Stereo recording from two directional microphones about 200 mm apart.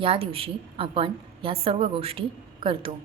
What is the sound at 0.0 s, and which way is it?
A woman's voice, 30° right (ahead or behind).